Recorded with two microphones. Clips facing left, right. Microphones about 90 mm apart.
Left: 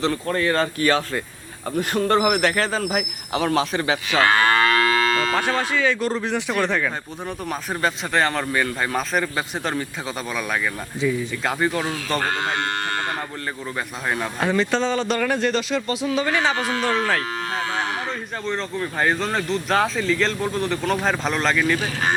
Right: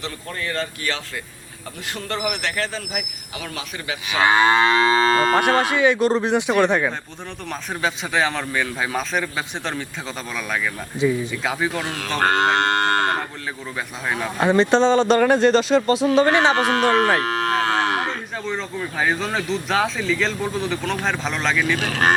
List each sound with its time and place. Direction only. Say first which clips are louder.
0.1 s a man's voice: left 7 dB; 55° left (ahead or behind); by 3.8 s 35° left (ahead or behind)
4.2 s speech: right 3 dB; 20° right (ahead or behind); by 5.4 s 40° right (ahead or behind)
5.4 s speech: right 5 dB; 60° right (ahead or behind)
5.7 s speech: right 4 dB; 20° right (ahead or behind)
7.5 s speech: even; centre (ahead or behind)
12.2 s livestock: right 6 dB; 65° right (ahead or behind)
13.7 s speech: even; centre (ahead or behind)
14.5 s speech: right 7 dB; 25° right (ahead or behind)
16.0 s speech: right 6 dB; 45° right (ahead or behind)
16.3 s speech: right 5 dB; 65° right (ahead or behind)
17.2 s cattle: right 5 dB; 65° right (ahead or behind)
18.4 s speech: left 2 dB; centre (ahead or behind)
21.8 s speech: right 4 dB; 65° right (ahead or behind)